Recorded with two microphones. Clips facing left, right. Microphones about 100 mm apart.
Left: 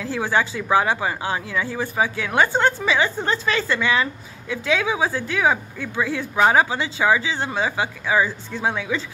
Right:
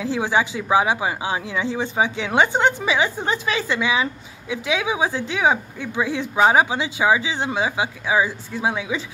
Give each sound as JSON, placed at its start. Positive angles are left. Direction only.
{"t": 0.0, "sound": "speech", "side_deg": -15}